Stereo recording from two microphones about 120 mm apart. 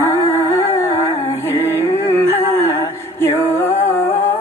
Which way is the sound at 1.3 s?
20° left (ahead or behind).